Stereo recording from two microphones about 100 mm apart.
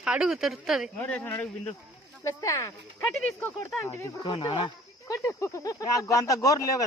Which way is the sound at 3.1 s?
5° left (ahead or behind).